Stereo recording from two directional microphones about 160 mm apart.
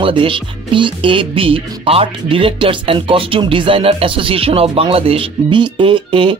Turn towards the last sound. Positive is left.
turn(degrees=-30)  # may be behind; listen again after turning